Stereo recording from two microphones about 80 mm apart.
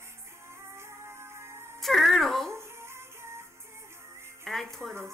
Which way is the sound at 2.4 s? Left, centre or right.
Right.